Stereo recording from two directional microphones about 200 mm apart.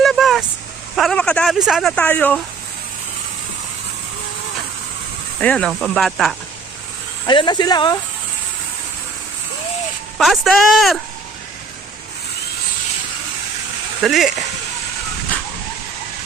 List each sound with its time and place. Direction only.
0.0 s vehicle: centre (ahead or behind)
0.9 s speech: centre (ahead or behind)
5.4 s speech: 5° left (ahead or behind)
7.3 s speech: 25° left (ahead or behind)
10.2 s speech: centre (ahead or behind)
14.0 s speech: centre (ahead or behind)